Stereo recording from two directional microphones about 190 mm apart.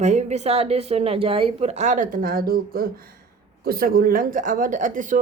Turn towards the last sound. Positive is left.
turn(degrees=-45)  # may be behind; listen again after turning